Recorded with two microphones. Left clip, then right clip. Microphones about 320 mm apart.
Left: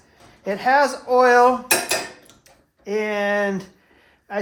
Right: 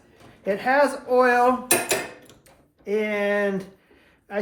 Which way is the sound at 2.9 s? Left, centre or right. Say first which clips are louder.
Left 2 dB; centre.